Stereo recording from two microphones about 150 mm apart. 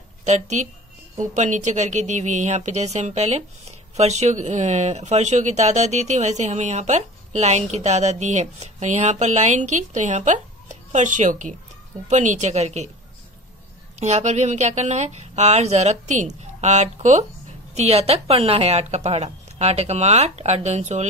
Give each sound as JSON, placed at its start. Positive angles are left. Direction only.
{"t": 0.2, "sound": "a woman's voice", "side_deg": -50}
{"t": 13.9, "sound": "speech", "side_deg": -50}